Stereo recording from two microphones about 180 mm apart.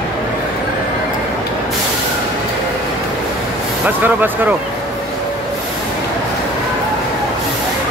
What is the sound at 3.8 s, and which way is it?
Speech, 10° right (ahead or behind).